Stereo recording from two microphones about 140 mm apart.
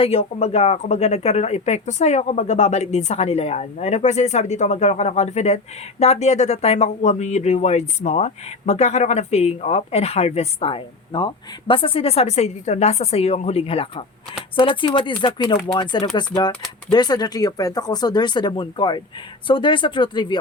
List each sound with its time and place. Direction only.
0.0 s speech: 50° left (ahead or behind); by 20.4 s 35° left (ahead or behind)